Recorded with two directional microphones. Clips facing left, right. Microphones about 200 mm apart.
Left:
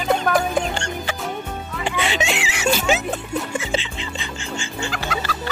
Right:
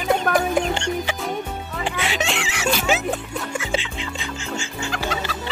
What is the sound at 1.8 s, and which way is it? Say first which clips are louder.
Music: left 2 dB; centre (ahead or behind).